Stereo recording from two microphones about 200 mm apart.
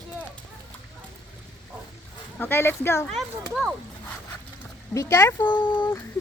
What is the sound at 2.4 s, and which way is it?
Speech, 10° left (ahead or behind).